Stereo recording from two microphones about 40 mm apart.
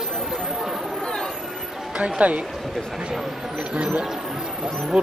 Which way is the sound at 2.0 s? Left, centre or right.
Right.